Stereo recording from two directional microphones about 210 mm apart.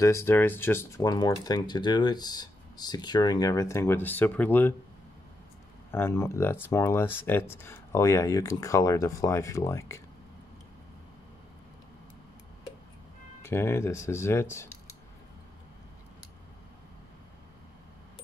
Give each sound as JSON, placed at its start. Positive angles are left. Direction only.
{"t": 0.0, "sound": "speech", "side_deg": 15}
{"t": 5.9, "sound": "speech", "side_deg": 10}
{"t": 13.4, "sound": "speech", "side_deg": 10}